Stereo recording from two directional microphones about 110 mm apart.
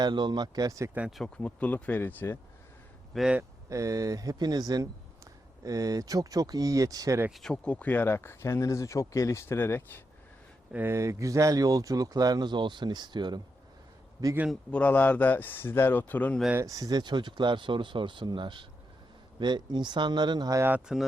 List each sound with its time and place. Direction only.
0.0 s speech: 40° right (ahead or behind)
1.4 s a man's voice: 15° left (ahead or behind)
3.2 s speech: 5° right (ahead or behind)
3.7 s speech: 30° right (ahead or behind)
7.3 s speech: centre (ahead or behind); by 9.8 s 20° left (ahead or behind)
10.7 s speech: 15° right (ahead or behind)
10.9 s speech: 25° right (ahead or behind)
14.7 s a man's voice: 10° left (ahead or behind)
16.6 s speech: 30° right (ahead or behind)
20.6 s speech: 15° right (ahead or behind)